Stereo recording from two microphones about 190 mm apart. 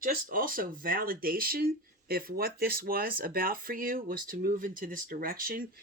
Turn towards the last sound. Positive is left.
turn(degrees=-50)  # may be behind; listen again after turning